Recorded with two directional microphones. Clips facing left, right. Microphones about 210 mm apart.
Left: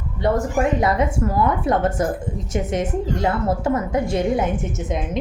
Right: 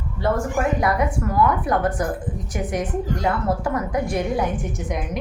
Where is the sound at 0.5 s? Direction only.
25° left (ahead or behind).